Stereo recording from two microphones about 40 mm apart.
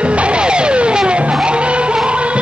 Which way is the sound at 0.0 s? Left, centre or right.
Right.